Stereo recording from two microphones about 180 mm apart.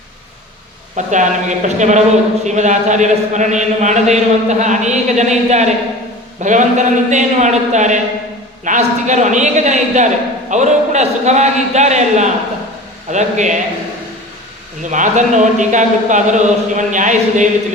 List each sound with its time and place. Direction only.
0.9 s a man's voice: 45° right (ahead or behind)
14.8 s a man's voice: 45° right (ahead or behind)